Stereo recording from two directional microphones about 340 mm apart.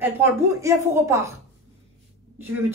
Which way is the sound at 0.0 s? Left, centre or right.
Centre.